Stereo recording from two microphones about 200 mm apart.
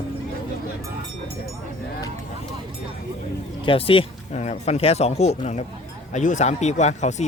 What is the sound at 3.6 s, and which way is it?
Speech, 25° left (ahead or behind).